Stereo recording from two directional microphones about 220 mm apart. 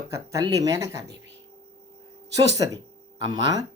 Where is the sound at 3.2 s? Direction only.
20° right (ahead or behind).